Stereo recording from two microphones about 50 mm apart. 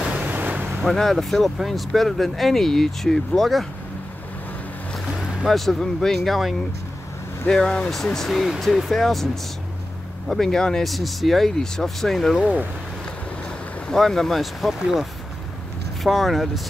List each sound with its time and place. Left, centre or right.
0.2 s ocean: right
0.8 s speech: centre
5.0 s vehicle: centre
5.5 s speech: centre
7.4 s speech: centre
7.9 s speech: centre
13.9 s speech: centre